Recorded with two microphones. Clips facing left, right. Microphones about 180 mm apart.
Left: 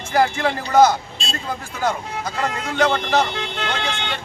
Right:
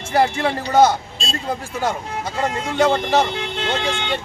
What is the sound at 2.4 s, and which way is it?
Speech, 25° right (ahead or behind).